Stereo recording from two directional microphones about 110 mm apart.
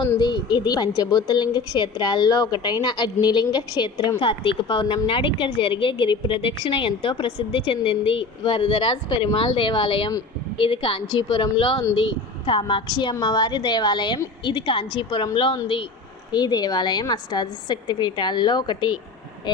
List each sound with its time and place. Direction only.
0.2 s a woman's voice: 40° left (ahead or behind)
4.2 s a woman's voice: 50° left (ahead or behind)
16.3 s a woman's voice: 40° left (ahead or behind)